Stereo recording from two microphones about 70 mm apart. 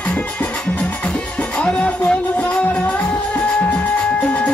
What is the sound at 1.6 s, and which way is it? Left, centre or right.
Music, centre.